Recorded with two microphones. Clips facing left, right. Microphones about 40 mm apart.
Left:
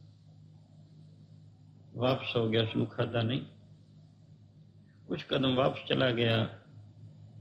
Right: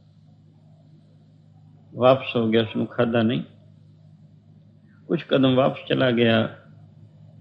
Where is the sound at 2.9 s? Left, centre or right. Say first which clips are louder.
Right 11 dB; right.